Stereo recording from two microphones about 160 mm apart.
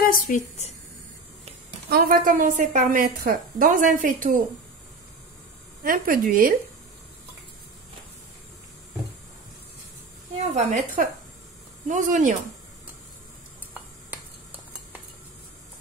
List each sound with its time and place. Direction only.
0.0 s speech: 60° left (ahead or behind)
1.9 s a woman's voice: 70° right (ahead or behind)
5.9 s a woman's voice: 60° right (ahead or behind)
10.3 s a woman's voice: 45° right (ahead or behind)
13.7 s a sound: 10° right (ahead or behind)